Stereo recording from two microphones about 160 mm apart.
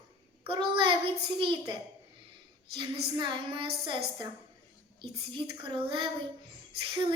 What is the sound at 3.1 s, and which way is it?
Speech, 30° right (ahead or behind).